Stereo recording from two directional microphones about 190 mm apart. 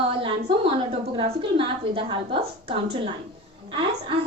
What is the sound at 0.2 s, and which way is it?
A woman's voice, 30° right (ahead or behind).